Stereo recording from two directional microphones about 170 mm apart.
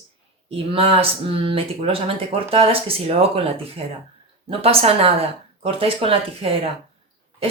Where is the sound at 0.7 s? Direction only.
35° right (ahead or behind).